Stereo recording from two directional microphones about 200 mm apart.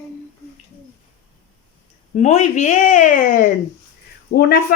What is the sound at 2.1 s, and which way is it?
Speech, 35° left (ahead or behind).